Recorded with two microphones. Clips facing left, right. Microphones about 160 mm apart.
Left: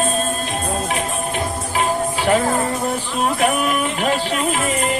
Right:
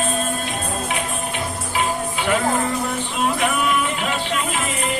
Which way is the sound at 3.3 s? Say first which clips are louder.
Left 4 dB; 40° left (ahead or behind).